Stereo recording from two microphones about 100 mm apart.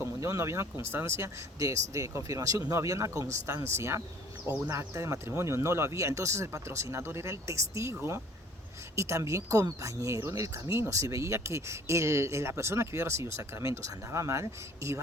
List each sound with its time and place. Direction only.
0.0 s speech: 30° right (ahead or behind)
9.0 s speech: 30° right (ahead or behind)